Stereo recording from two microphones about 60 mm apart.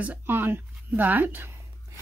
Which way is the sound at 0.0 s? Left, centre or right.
Right.